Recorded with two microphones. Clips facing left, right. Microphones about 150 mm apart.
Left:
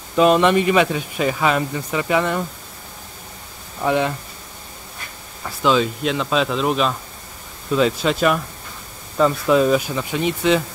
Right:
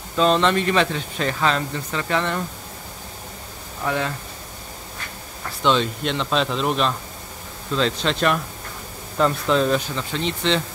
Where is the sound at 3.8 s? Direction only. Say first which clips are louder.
Left 5 dB; 15° left (ahead or behind).